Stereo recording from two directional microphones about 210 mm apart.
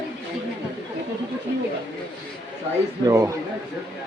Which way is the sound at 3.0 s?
15° right (ahead or behind).